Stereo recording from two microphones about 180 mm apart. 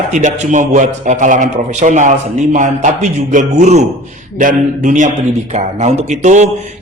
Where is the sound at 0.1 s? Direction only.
40° right (ahead or behind).